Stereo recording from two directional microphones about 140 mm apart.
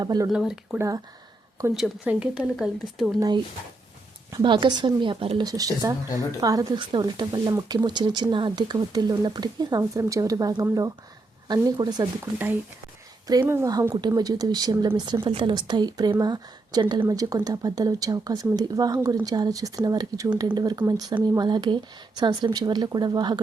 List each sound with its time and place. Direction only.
0.0 s speech: 30° right (ahead or behind)
0.3 s speech: 5° right (ahead or behind)
0.8 s speech: 25° right (ahead or behind)
1.7 s speech: 5° right (ahead or behind)
3.2 s speech: 30° right (ahead or behind)
4.4 s speech: 35° right (ahead or behind)
5.5 s speech: 25° right (ahead or behind)
13.4 s speech: 20° right (ahead or behind)